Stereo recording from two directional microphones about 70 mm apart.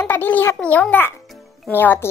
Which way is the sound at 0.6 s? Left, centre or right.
Left.